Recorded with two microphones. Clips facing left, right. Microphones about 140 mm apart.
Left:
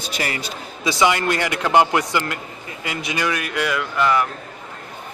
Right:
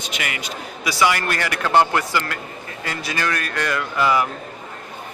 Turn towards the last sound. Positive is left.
turn(degrees=-5)  # may be behind; listen again after turning